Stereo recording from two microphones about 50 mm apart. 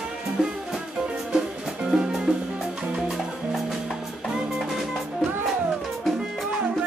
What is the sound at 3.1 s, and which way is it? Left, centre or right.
Music, centre.